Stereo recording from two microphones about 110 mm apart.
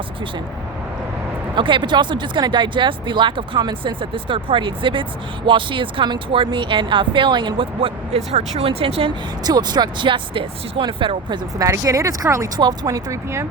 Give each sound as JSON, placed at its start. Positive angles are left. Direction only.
{"t": 1.5, "sound": "speech", "side_deg": -45}
{"t": 9.4, "sound": "speech", "side_deg": -40}
{"t": 11.5, "sound": "speech", "side_deg": -30}